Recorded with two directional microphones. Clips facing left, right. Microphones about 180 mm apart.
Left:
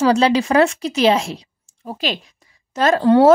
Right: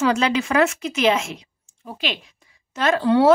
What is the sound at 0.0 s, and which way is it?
A woman's voice, 35° left (ahead or behind).